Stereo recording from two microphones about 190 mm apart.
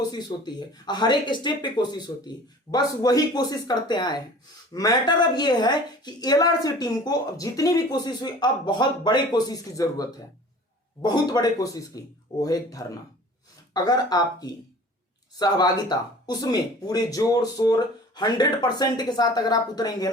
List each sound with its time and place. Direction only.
0.1 s speech: 20° left (ahead or behind)